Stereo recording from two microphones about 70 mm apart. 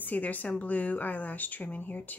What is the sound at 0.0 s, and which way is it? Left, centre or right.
A woman's voice, left.